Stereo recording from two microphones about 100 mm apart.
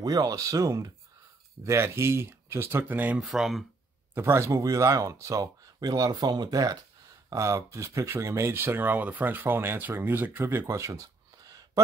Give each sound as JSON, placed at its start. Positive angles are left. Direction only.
{"t": 0.0, "sound": "speech", "side_deg": -35}
{"t": 3.2, "sound": "speech", "side_deg": -5}
{"t": 4.1, "sound": "speech", "side_deg": -25}